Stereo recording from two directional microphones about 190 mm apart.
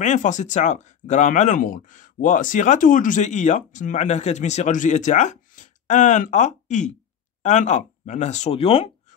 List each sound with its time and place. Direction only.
0.0 s speech: 40° left (ahead or behind)